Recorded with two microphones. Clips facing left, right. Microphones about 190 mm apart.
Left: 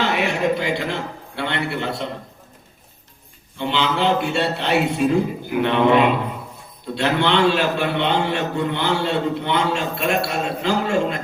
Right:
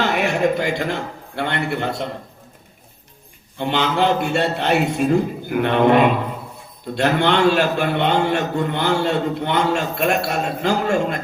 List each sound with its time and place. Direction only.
0.0 s a man's voice: 50° right (ahead or behind)
3.6 s a man's voice: 50° right (ahead or behind)